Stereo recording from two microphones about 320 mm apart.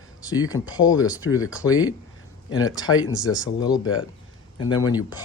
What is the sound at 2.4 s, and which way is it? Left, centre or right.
Speech, centre.